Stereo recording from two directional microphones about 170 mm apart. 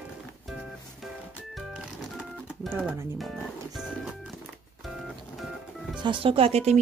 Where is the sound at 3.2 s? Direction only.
Centre (ahead or behind).